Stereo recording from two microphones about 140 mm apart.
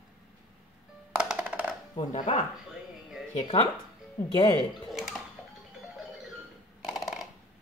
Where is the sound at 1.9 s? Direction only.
50° left (ahead or behind).